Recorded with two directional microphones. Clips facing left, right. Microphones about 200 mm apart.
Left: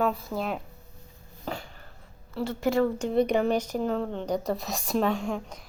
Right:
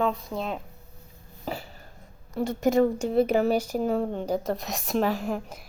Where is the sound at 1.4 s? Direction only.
5° right (ahead or behind).